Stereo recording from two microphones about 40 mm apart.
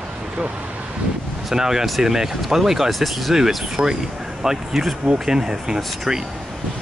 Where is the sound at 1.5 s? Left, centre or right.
Centre.